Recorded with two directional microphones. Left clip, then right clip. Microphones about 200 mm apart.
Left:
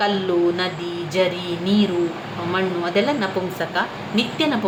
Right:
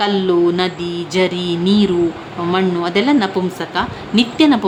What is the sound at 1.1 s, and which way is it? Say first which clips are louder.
A woman's voice: right 3 dB; 50° right (ahead or behind).